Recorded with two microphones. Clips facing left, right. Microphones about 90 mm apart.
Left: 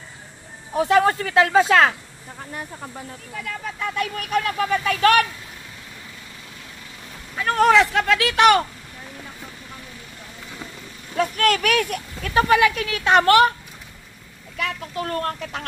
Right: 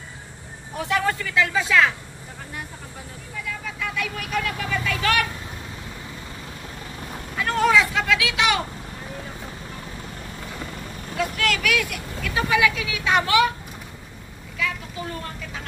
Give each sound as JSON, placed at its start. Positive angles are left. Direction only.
{"t": 0.7, "sound": "speech", "side_deg": 40}
{"t": 3.4, "sound": "speech", "side_deg": 40}
{"t": 7.5, "sound": "speech", "side_deg": 60}
{"t": 11.1, "sound": "speech", "side_deg": 45}
{"t": 14.6, "sound": "speech", "side_deg": 60}